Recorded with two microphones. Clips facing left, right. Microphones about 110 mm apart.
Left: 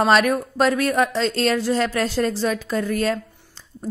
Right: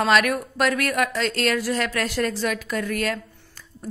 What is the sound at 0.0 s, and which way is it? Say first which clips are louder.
A woman's voice: left 3 dB; 30° left (ahead or behind).